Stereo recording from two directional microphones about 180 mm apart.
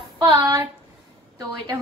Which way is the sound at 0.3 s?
15° right (ahead or behind).